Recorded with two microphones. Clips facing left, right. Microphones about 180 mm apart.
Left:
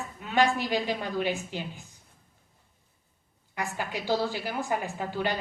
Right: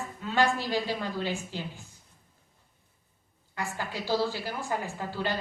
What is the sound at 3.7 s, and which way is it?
A woman's voice, 15° left (ahead or behind).